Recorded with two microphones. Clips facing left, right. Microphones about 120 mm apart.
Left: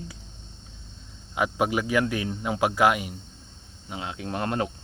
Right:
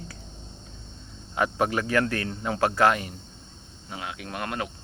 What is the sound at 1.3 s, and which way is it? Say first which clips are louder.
Speech: even; 10° left (ahead or behind).